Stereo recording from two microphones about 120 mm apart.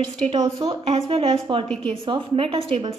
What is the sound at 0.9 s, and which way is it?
Speech, 50° right (ahead or behind).